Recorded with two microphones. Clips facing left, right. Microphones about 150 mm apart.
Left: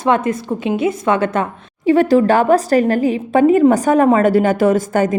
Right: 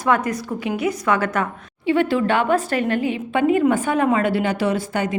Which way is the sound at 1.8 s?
40° left (ahead or behind).